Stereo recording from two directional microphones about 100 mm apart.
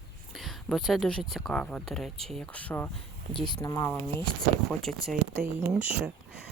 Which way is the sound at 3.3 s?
50° left (ahead or behind).